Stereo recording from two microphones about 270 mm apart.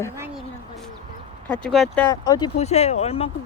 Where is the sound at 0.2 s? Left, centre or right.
Centre.